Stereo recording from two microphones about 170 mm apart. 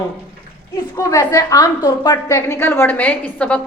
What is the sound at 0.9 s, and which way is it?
A woman's voice, 20° left (ahead or behind).